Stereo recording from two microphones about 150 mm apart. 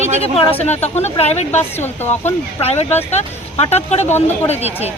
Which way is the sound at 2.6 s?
45° left (ahead or behind).